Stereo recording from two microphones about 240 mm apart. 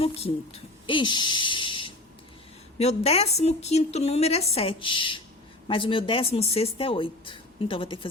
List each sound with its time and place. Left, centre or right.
0.0 s a woman's voice: left